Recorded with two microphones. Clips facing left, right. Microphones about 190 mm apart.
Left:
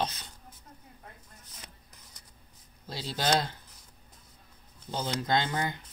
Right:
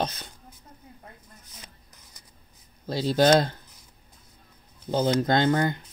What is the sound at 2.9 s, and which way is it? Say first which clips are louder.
Speech: right 10 dB; 50° right (ahead or behind).